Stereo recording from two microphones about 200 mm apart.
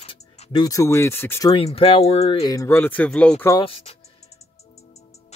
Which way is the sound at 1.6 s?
30° left (ahead or behind).